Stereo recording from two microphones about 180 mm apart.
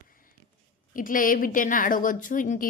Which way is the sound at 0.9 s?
50° left (ahead or behind).